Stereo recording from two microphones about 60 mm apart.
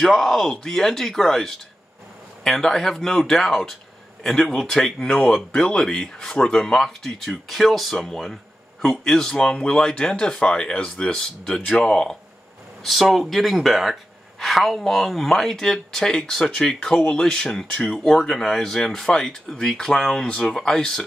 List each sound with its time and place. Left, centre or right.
0.0 s speech: centre
5.0 s speech: centre
12.8 s speech: centre